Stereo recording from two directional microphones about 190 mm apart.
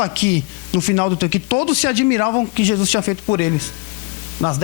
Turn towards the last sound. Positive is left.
turn(degrees=25)  # may be behind; listen again after turning